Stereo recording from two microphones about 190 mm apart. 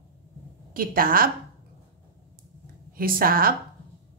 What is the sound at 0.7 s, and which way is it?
Speech, 50° right (ahead or behind).